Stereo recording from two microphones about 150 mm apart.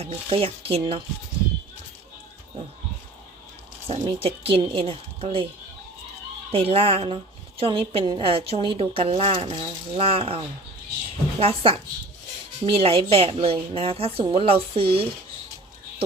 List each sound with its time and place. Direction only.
0.0 s speech: 40° right (ahead or behind)
3.8 s speech: 40° right (ahead or behind)
6.5 s speech: 40° right (ahead or behind)